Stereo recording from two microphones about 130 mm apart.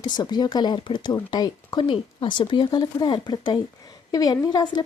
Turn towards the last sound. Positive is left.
turn(degrees=30)  # may be behind; listen again after turning